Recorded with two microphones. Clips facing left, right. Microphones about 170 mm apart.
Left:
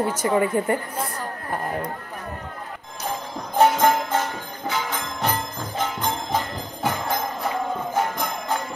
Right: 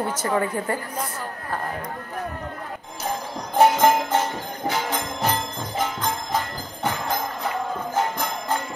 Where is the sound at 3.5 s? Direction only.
10° right (ahead or behind).